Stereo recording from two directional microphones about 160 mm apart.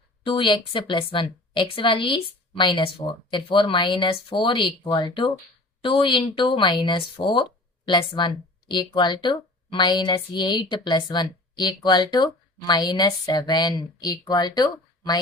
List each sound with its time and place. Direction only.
0.3 s a woman's voice: 30° left (ahead or behind)